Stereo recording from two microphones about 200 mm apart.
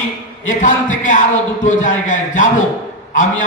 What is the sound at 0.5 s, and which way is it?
A man's voice, 40° left (ahead or behind).